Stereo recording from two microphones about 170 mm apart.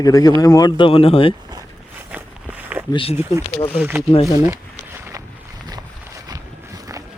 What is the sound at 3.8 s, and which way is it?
Speech, 10° right (ahead or behind).